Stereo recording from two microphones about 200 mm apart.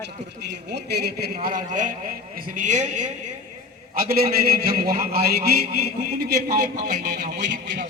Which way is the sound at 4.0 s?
50° right (ahead or behind).